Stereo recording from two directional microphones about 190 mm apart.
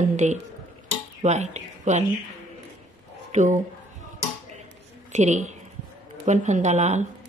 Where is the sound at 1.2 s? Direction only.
35° right (ahead or behind).